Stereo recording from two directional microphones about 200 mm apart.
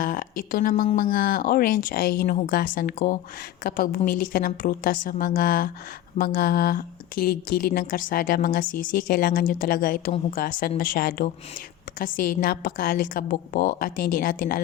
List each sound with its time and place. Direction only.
0.0 s a woman's voice: 45° left (ahead or behind)